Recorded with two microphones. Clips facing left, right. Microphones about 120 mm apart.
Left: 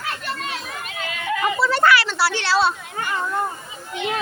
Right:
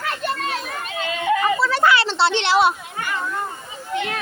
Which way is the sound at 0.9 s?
25° right (ahead or behind).